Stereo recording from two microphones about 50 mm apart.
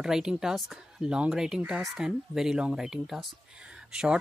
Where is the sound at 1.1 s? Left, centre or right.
Centre.